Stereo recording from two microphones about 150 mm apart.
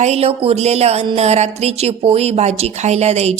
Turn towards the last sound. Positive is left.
turn(degrees=-45)  # may be behind; listen again after turning